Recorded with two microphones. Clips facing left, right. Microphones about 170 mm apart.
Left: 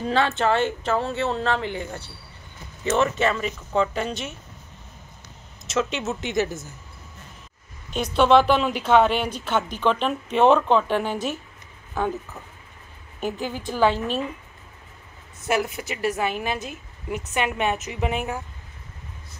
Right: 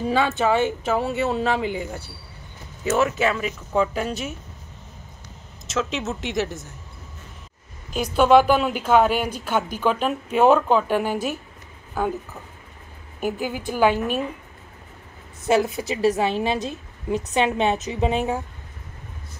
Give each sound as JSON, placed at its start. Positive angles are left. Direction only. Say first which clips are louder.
{"t": 0.0, "sound": "speech", "louder": "right 1 dB", "side_deg": -10}
{"t": 5.7, "sound": "speech", "louder": "left 1 dB", "side_deg": 0}
{"t": 7.9, "sound": "speech", "louder": "right 2 dB", "side_deg": -5}
{"t": 13.2, "sound": "speech", "louder": "right 2 dB", "side_deg": -10}
{"t": 15.4, "sound": "a woman's voice", "louder": "right 4 dB", "side_deg": -25}